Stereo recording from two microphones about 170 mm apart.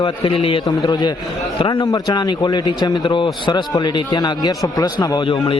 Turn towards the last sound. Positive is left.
turn(degrees=30)  # may be behind; listen again after turning